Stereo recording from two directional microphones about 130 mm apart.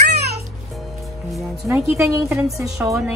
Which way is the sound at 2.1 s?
25° right (ahead or behind).